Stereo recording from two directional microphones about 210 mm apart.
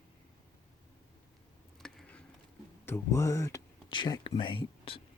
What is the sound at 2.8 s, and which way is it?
Speech, 10° left (ahead or behind).